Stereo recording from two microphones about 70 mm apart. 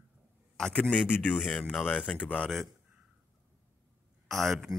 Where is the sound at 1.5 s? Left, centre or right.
Left.